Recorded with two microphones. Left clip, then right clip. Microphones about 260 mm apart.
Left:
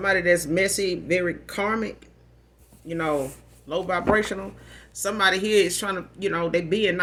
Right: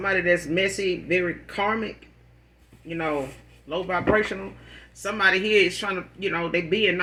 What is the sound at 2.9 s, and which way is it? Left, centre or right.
Speech, left.